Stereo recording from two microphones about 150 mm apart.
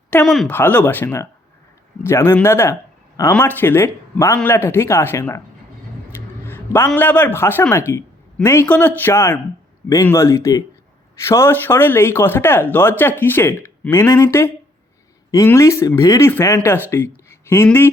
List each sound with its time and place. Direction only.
0.3 s speech: centre (ahead or behind)
0.5 s speech: 10° left (ahead or behind)
17.2 s a sound: 15° left (ahead or behind)